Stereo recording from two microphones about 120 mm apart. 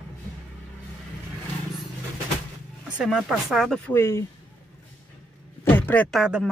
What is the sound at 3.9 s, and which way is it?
Speech, 20° left (ahead or behind).